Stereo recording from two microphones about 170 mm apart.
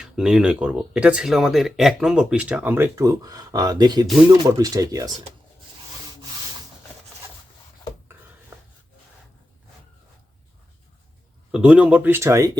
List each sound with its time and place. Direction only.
0.0 s speech: 5° right (ahead or behind); by 5.1 s 20° right (ahead or behind)
11.5 s speech: 5° right (ahead or behind)